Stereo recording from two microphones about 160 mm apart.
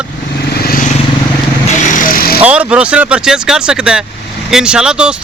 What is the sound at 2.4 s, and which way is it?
Speech, 10° right (ahead or behind).